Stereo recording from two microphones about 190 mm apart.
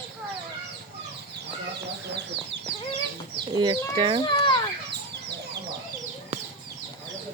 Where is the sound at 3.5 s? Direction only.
25° right (ahead or behind).